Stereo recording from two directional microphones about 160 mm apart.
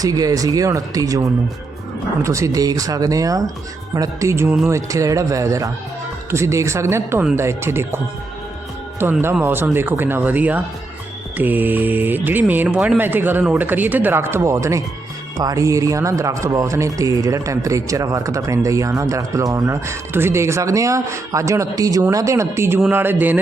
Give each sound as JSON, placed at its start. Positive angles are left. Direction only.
{"t": 0.0, "sound": "speech", "side_deg": -20}
{"t": 9.3, "sound": "speech", "side_deg": -15}